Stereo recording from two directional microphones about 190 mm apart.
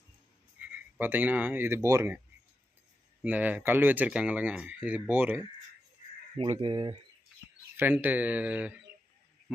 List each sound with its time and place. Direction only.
0.6 s speech: 10° right (ahead or behind)
3.2 s speech: 10° right (ahead or behind)
6.3 s speech: 30° right (ahead or behind)
7.8 s speech: 10° right (ahead or behind)